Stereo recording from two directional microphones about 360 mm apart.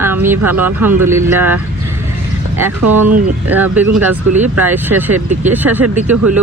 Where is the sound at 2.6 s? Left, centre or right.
Centre.